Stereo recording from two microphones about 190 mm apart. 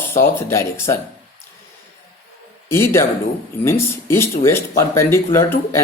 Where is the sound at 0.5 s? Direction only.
15° left (ahead or behind).